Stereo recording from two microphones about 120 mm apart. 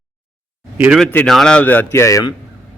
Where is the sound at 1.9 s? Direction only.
25° left (ahead or behind).